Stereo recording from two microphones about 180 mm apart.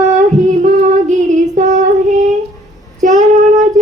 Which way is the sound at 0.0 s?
40° right (ahead or behind).